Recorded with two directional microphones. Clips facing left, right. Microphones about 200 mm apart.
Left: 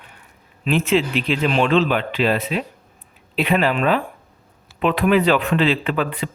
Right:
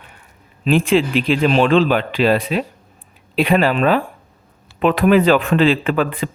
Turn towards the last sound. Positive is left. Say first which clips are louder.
# right 4 dB
turn(degrees=-45)  # may be behind; listen again after turning